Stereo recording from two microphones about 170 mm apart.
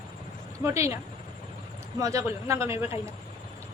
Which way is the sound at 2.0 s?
20° right (ahead or behind).